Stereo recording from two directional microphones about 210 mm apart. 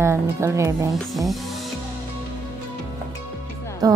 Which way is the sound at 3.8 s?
20° right (ahead or behind).